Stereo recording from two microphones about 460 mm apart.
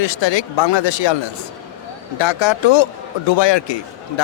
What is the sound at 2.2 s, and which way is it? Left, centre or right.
A man's voice, left.